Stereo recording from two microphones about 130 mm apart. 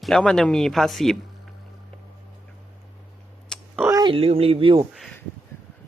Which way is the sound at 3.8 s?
25° right (ahead or behind).